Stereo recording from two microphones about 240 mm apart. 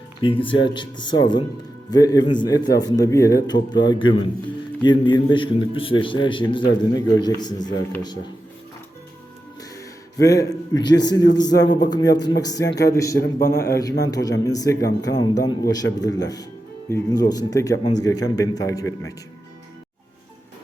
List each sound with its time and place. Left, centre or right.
0.2 s a man's voice: left
9.7 s a man's voice: centre
11.5 s speech: left
12.4 s a man's voice: centre
13.1 s a man's voice: left
13.6 s a man's voice: centre